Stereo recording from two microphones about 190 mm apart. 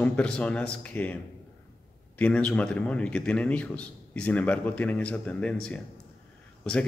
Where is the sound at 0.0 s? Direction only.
5° left (ahead or behind).